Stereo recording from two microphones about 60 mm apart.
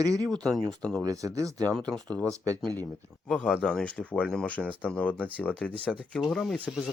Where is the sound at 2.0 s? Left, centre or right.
Centre.